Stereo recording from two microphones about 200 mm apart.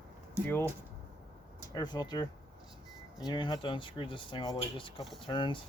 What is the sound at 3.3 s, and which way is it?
Speech, 20° left (ahead or behind).